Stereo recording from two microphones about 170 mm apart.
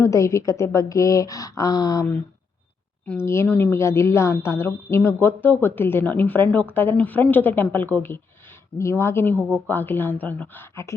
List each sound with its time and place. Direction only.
0.0 s a woman's voice: 15° left (ahead or behind)
3.1 s a woman's voice: 15° left (ahead or behind)